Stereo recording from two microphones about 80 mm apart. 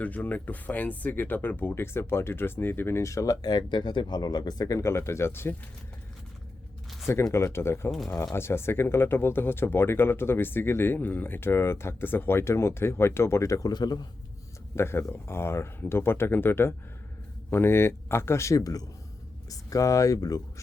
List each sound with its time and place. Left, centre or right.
0.0 s speech: centre; by 4.8 s left
4.8 s speech: left
7.3 s speech: left
7.9 s speech: centre
8.1 s speech: left
13.7 s a man's voice: left
14.8 s speech: left